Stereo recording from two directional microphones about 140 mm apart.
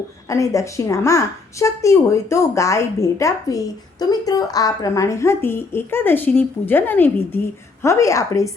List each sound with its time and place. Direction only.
0.3 s a woman's voice: 20° left (ahead or behind)